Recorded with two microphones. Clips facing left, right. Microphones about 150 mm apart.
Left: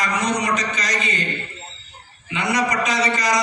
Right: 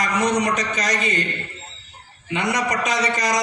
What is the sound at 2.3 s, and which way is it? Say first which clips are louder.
A man's voice: left 1 dB; 50° right (ahead or behind).